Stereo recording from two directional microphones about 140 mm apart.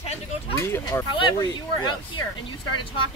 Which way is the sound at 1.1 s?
35° left (ahead or behind).